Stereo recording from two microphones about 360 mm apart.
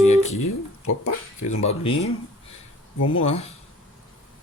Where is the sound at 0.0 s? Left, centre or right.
Centre.